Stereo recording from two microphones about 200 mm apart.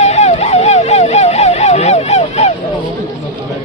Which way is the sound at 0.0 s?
35° left (ahead or behind).